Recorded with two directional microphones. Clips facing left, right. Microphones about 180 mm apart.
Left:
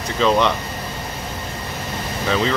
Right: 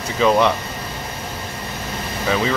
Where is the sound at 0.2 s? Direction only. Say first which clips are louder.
Right 1 dB; 5° right (ahead or behind).